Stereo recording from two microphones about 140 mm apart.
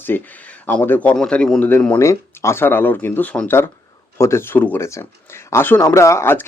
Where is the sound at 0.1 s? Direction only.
15° left (ahead or behind).